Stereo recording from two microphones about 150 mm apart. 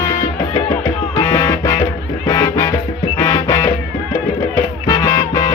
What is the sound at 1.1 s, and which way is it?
Music, 20° left (ahead or behind).